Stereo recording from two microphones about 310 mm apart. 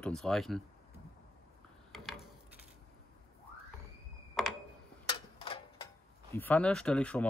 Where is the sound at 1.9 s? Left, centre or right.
Centre.